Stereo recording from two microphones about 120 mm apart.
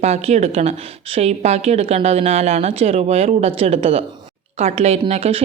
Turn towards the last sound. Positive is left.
turn(degrees=-55)  # may be behind; listen again after turning